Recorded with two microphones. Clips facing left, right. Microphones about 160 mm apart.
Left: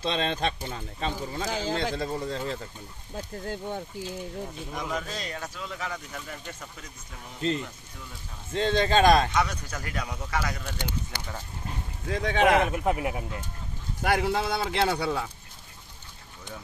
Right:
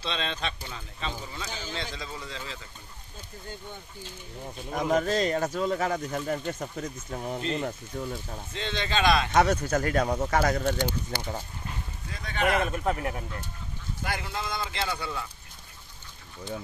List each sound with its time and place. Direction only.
0.0 s speech: 50° left (ahead or behind)
4.6 s speech: 45° right (ahead or behind)
8.5 s speech: 45° left (ahead or behind)
9.3 s speech: 45° right (ahead or behind)
12.1 s speech: 90° left
12.7 s speech: 15° left (ahead or behind)
14.0 s speech: 70° left (ahead or behind)